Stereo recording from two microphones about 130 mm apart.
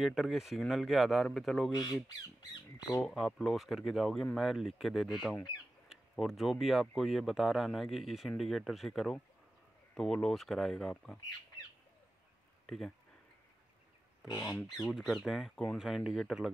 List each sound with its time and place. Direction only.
0.0 s speech: centre (ahead or behind)
3.0 s speech: 5° left (ahead or behind)
12.6 s speech: 5° left (ahead or behind)
14.2 s speech: 30° left (ahead or behind)
14.8 s speech: centre (ahead or behind)